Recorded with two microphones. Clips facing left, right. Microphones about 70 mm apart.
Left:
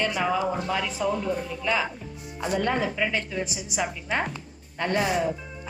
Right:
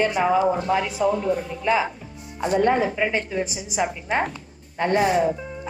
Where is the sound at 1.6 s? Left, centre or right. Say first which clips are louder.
Right 5 dB; centre.